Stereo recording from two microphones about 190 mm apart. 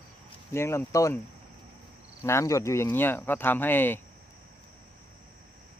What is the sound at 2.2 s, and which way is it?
Speech, 15° left (ahead or behind).